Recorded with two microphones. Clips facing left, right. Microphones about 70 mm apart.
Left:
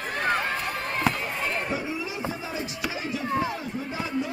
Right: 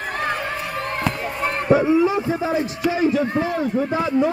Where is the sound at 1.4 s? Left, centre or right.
Right.